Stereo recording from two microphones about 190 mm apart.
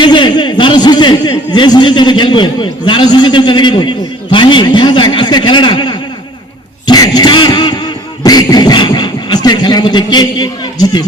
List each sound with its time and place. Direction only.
0.0 s a man's voice: 25° left (ahead or behind)
8.2 s beatboxing: 20° left (ahead or behind)